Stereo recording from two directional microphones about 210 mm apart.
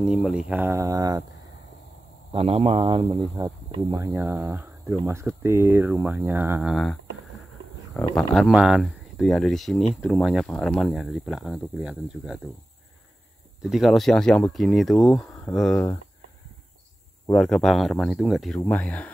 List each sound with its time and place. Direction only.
0.0 s speech: 5° right (ahead or behind)
2.3 s speech: 30° right (ahead or behind); by 6.7 s 10° right (ahead or behind)
6.7 s speech: 5° left (ahead or behind)
8.2 s speech: centre (ahead or behind)
13.6 s speech: centre (ahead or behind)
17.3 s speech: 5° left (ahead or behind)